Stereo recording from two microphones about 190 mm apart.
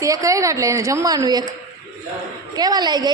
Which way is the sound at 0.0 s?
15° right (ahead or behind).